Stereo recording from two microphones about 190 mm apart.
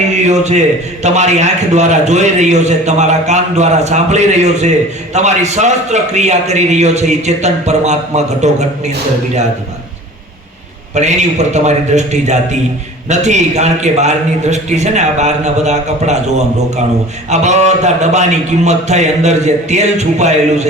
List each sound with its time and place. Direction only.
0.3 s a man's voice: 35° right (ahead or behind)
10.9 s a man's voice: 35° right (ahead or behind)
17.2 s a man's voice: 35° right (ahead or behind)